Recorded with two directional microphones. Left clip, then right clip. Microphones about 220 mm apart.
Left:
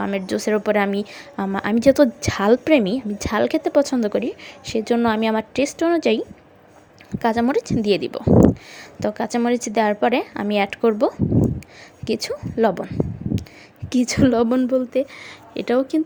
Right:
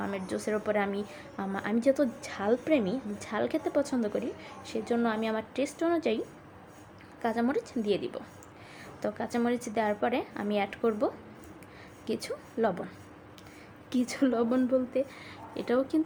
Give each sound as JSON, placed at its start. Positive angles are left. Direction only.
{"t": 0.0, "sound": "a woman's voice", "side_deg": 40}